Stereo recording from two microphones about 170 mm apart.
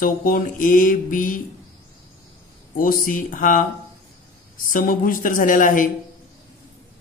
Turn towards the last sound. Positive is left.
turn(degrees=50)  # may be behind; listen again after turning